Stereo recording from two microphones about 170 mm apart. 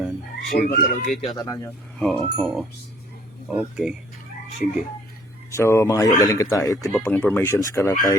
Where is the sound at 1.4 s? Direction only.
20° left (ahead or behind).